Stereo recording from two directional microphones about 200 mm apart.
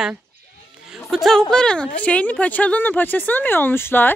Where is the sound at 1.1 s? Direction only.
Centre (ahead or behind).